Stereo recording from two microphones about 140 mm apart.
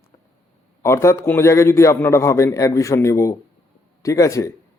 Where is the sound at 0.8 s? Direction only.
20° left (ahead or behind).